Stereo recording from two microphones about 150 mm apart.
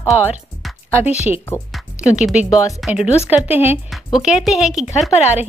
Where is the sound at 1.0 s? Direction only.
10° right (ahead or behind).